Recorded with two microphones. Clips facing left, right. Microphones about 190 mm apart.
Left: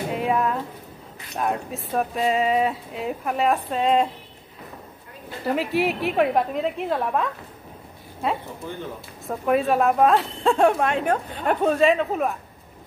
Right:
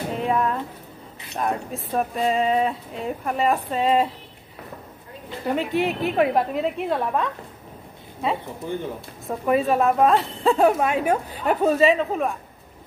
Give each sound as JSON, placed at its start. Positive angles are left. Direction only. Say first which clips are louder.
{"t": 0.1, "sound": "a sound", "louder": "even", "side_deg": 5}
{"t": 1.3, "sound": "speech", "louder": "even", "side_deg": 0}
{"t": 5.5, "sound": "speech", "louder": "even", "side_deg": 5}
{"t": 8.6, "sound": "speech", "louder": "right 6 dB", "side_deg": -15}
{"t": 9.3, "sound": "speech", "louder": "even", "side_deg": 0}